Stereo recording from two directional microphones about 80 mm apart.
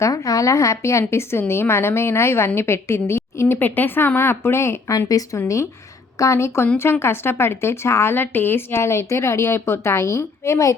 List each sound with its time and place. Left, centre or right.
0.0 s speech: left
4.9 s a woman's voice: left